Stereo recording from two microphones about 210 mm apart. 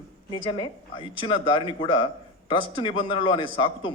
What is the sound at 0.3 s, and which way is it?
A man's voice, 20° left (ahead or behind).